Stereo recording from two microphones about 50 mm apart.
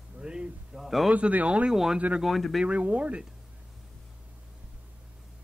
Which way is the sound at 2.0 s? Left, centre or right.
Right.